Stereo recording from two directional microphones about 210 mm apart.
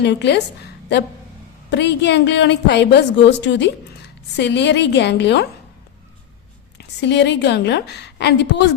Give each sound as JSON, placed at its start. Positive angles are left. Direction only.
{"t": 0.0, "sound": "a woman's voice", "side_deg": 55}
{"t": 1.7, "sound": "a woman's voice", "side_deg": 55}
{"t": 6.7, "sound": "a woman's voice", "side_deg": 55}